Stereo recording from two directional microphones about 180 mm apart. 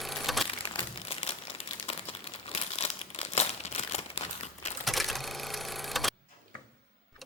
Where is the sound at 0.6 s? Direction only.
30° left (ahead or behind).